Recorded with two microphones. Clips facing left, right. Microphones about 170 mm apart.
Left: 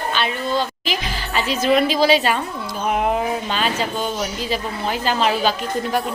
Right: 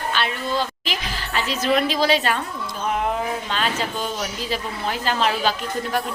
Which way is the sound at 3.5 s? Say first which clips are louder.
Left 3 dB; centre (ahead or behind).